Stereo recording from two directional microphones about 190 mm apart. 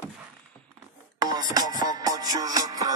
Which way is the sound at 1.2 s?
20° right (ahead or behind).